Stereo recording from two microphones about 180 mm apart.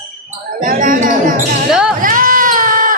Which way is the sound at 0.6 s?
50° right (ahead or behind).